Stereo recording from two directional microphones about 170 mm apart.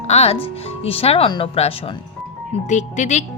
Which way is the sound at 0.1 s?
40° left (ahead or behind).